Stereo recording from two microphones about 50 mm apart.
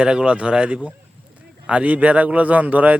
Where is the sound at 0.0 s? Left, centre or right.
Centre.